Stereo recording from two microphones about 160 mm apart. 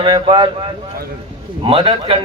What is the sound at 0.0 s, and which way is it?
Speech, 30° right (ahead or behind).